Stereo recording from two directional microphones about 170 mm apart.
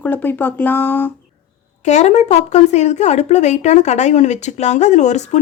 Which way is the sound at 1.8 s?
45° left (ahead or behind).